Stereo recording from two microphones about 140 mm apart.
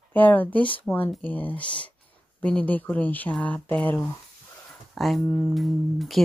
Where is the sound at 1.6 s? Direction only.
35° left (ahead or behind).